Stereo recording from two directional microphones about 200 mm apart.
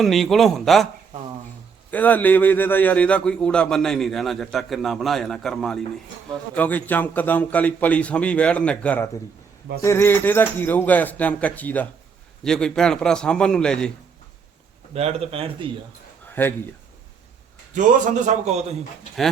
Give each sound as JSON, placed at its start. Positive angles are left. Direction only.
{"t": 0.0, "sound": "a man's voice", "side_deg": 0}
{"t": 1.9, "sound": "a man's voice", "side_deg": 10}
{"t": 14.9, "sound": "speech", "side_deg": -30}
{"t": 16.2, "sound": "a sound", "side_deg": 10}
{"t": 17.7, "sound": "a man's voice", "side_deg": -40}